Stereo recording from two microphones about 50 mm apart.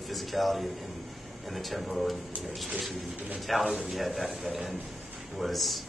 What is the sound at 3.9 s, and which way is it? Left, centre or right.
Speech, centre.